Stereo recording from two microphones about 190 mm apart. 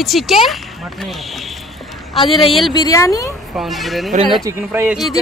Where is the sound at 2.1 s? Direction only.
30° left (ahead or behind).